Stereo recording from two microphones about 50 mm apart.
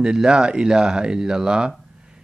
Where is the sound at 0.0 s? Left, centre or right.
Centre.